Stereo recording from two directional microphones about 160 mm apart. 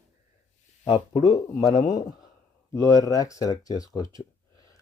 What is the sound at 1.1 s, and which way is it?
Speech, 25° left (ahead or behind).